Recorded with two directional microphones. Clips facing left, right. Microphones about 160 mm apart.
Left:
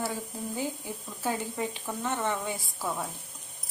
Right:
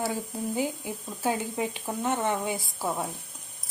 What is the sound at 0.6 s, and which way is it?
Speech, 10° right (ahead or behind).